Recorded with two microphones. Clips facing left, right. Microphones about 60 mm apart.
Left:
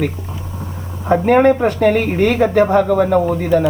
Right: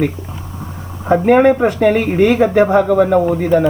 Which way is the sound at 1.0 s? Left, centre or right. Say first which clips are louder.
Right 1 dB; centre.